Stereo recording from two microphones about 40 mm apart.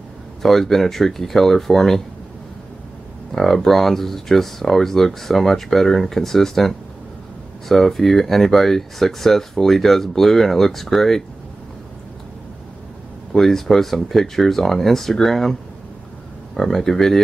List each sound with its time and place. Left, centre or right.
0.4 s speech: centre
3.3 s speech: centre
13.3 s speech: centre
16.5 s speech: centre